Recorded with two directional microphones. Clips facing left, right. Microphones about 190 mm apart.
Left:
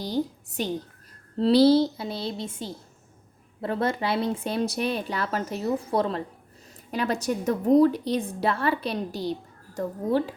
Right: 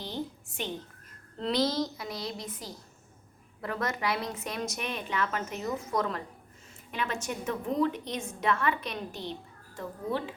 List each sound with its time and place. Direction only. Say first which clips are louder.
0.0 s a woman's voice: left 9 dB; 35° left (ahead or behind)